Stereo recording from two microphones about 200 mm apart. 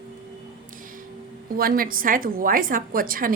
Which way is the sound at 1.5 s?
45° right (ahead or behind).